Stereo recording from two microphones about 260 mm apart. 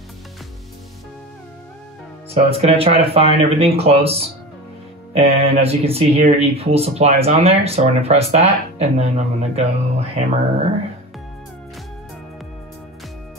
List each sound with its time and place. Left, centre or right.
2.3 s speech: right